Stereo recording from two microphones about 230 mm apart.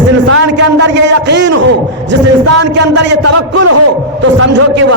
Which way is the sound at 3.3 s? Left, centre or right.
Right.